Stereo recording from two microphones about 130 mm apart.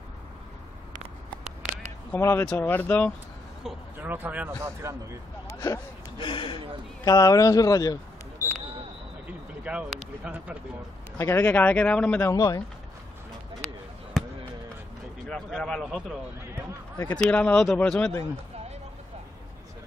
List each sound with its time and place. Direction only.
2.0 s speech: 15° left (ahead or behind)
4.0 s speech: 15° right (ahead or behind)
4.6 s speech: 25° right (ahead or behind)
5.5 s a sound: 25° left (ahead or behind)
6.1 s speech: 40° left (ahead or behind)
7.1 s speech: 25° left (ahead or behind)
9.6 s speech: 10° right (ahead or behind)
11.1 s speech: 20° left (ahead or behind)
12.3 s speech: 25° left (ahead or behind)
14.2 s basketball bounce: centre (ahead or behind)
15.2 s speech: 5° left (ahead or behind)
17.2 s speech: 10° left (ahead or behind)